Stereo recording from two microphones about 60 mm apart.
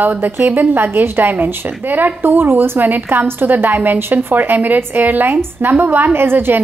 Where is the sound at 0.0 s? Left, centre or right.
Right.